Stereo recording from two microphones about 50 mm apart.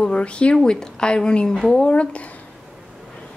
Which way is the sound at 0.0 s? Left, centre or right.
Left.